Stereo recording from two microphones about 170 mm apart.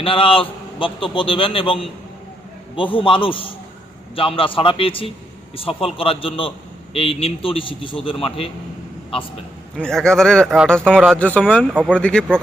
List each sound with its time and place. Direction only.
0.0 s a man's voice: 30° left (ahead or behind)
9.7 s speech: 5° left (ahead or behind)
11.7 s speech: 10° right (ahead or behind)
11.9 s speech: 5° left (ahead or behind)